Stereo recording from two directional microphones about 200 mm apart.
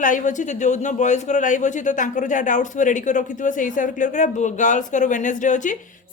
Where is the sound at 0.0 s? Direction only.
40° left (ahead or behind).